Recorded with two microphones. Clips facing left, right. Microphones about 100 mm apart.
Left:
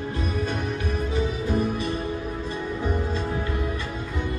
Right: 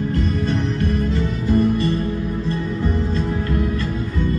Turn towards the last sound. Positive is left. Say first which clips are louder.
# right 7 dB
turn(degrees=10)  # may be behind; listen again after turning